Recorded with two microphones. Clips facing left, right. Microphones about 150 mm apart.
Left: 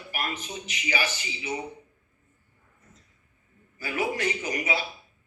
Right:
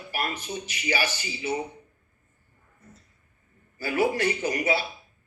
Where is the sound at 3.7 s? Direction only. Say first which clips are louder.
Right 5 dB; 35° right (ahead or behind).